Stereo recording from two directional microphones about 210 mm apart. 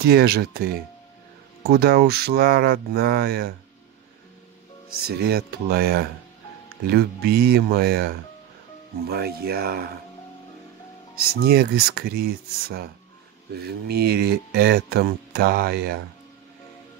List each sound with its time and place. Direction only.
0.0 s speech: 50° right (ahead or behind)
4.9 s speech: 50° right (ahead or behind)
11.2 s speech: 50° right (ahead or behind)